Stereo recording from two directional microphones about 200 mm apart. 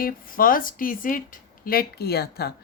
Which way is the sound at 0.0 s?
45° left (ahead or behind).